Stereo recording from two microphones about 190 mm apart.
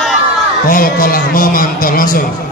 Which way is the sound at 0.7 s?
50° left (ahead or behind).